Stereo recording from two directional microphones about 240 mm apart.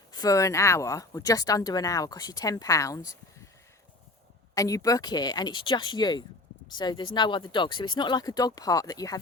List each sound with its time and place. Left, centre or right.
0.1 s speech: centre
4.5 s speech: centre